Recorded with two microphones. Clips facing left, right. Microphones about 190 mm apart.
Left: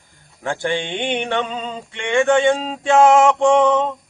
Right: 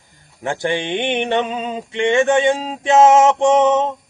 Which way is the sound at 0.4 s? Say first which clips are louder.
Right 2 dB; 15° right (ahead or behind).